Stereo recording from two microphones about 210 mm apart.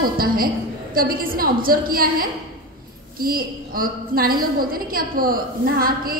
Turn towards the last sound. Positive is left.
turn(degrees=-45)  # may be behind; listen again after turning